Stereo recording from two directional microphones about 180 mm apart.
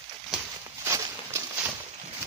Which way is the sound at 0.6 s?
15° right (ahead or behind).